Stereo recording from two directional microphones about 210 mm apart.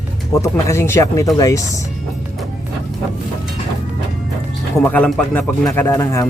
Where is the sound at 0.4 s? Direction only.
15° left (ahead or behind).